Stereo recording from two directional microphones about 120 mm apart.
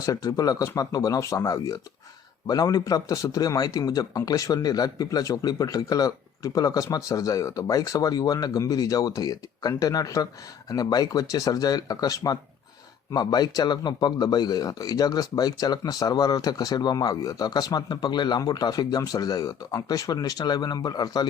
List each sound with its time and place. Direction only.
0.0 s a man's voice: 30° left (ahead or behind)